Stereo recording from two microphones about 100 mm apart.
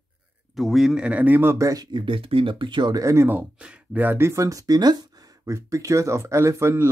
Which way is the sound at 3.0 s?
25° right (ahead or behind).